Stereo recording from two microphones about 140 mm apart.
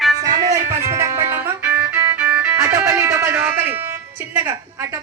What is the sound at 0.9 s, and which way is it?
Music, 20° right (ahead or behind).